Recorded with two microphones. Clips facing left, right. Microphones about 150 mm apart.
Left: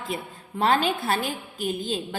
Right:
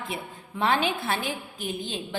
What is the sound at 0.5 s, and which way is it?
Speech, 40° left (ahead or behind).